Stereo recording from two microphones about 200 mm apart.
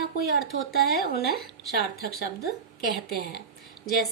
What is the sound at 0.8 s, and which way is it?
A woman's voice, 50° left (ahead or behind).